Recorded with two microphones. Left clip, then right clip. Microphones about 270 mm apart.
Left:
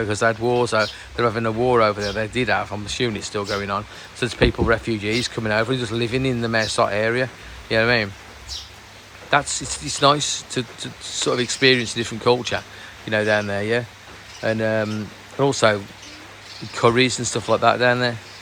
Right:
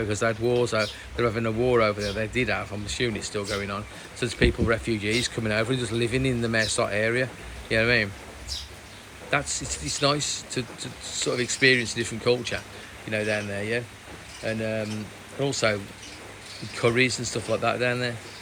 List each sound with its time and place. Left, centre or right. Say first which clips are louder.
0.0 s speech: left 5 dB; centre
9.3 s speech: left 7 dB; centre
14.4 s speech: left 8 dB; left
15.4 s speech: left 7 dB; centre